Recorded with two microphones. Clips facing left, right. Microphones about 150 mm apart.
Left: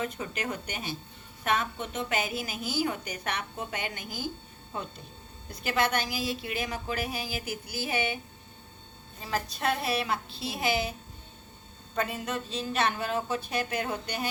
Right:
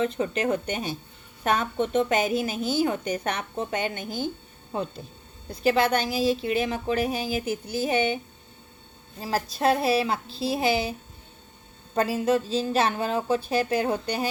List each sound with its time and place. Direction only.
0.0 s a woman's voice: 30° right (ahead or behind)
9.2 s a woman's voice: 35° right (ahead or behind)
11.9 s a woman's voice: 35° right (ahead or behind)